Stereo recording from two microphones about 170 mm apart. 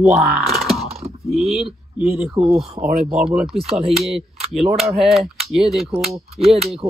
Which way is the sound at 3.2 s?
5° right (ahead or behind).